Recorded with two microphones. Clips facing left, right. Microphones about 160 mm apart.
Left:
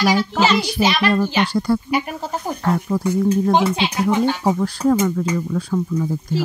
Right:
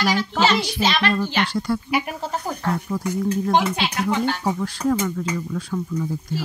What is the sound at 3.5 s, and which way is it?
Speech, 20° left (ahead or behind).